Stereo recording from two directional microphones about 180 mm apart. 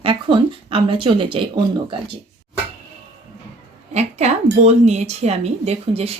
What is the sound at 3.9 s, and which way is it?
A woman's voice, 35° right (ahead or behind).